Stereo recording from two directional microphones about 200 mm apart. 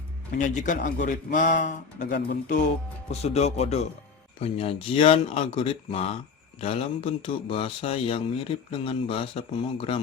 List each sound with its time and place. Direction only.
0.3 s speech: 40° left (ahead or behind)